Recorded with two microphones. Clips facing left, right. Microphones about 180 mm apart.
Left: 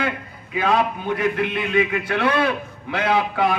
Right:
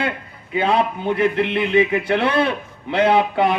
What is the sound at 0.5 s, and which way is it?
A man's voice, 30° right (ahead or behind).